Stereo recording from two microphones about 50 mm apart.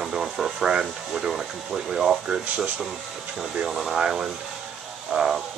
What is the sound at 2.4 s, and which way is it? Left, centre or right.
Speech, right.